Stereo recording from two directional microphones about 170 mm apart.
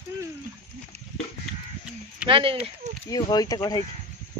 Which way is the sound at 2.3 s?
30° right (ahead or behind).